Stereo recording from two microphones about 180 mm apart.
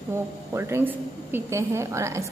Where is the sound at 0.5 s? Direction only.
15° right (ahead or behind).